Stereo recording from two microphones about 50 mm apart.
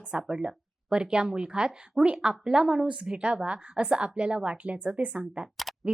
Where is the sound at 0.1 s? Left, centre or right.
Centre.